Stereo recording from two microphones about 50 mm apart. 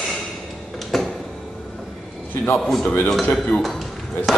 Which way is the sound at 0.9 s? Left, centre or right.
Centre.